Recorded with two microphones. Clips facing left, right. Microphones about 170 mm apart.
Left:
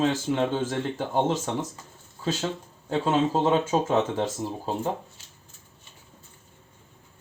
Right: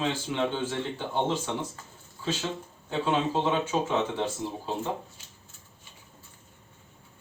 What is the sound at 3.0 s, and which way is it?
Speech, 40° left (ahead or behind).